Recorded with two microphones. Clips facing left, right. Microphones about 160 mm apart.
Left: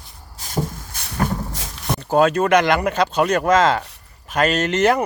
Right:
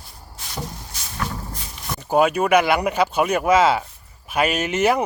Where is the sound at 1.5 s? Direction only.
90° left.